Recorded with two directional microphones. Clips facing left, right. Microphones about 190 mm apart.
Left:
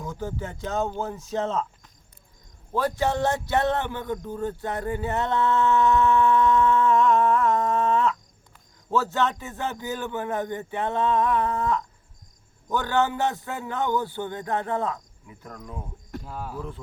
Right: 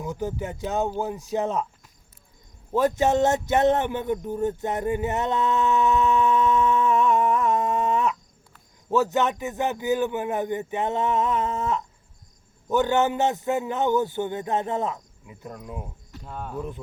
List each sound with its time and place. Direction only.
0.0 s speech: 15° right (ahead or behind)
2.7 s a man's voice: 20° right (ahead or behind)
16.2 s speech: 5° left (ahead or behind)
16.6 s speech: 15° right (ahead or behind)